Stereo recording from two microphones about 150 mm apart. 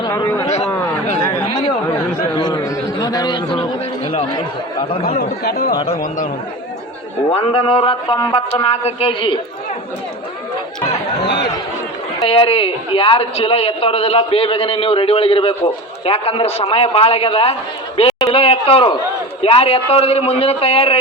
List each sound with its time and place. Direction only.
0.0 s a sound: 25° left (ahead or behind)
1.2 s chatter: 25° left (ahead or behind)
5.0 s speech: 90° left
7.3 s a man's voice: 40° left (ahead or behind)
8.5 s a man's voice: 40° left (ahead or behind)
12.2 s a man's voice: 40° left (ahead or behind)